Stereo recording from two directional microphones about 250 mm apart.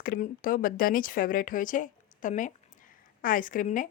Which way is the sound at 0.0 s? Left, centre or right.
Left.